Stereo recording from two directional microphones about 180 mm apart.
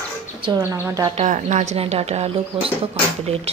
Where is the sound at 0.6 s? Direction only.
15° right (ahead or behind).